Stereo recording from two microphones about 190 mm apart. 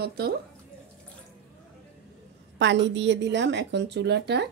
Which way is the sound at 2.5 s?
70° right (ahead or behind).